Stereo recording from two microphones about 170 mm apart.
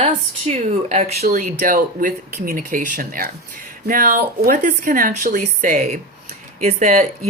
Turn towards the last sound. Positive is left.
turn(degrees=-50)  # may be behind; listen again after turning